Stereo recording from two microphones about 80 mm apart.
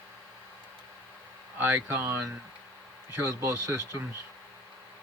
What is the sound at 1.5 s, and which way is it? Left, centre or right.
Speech, right.